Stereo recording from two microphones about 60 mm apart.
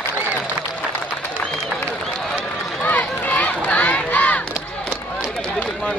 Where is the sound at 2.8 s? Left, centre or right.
Left.